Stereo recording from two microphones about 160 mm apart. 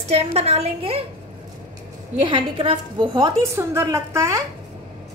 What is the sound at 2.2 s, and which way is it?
A woman's voice, 35° right (ahead or behind).